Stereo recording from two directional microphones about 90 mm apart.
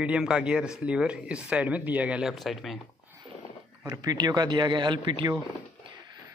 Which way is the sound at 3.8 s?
45° right (ahead or behind).